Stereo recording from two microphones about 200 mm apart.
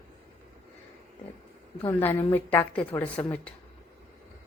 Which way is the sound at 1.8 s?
10° left (ahead or behind).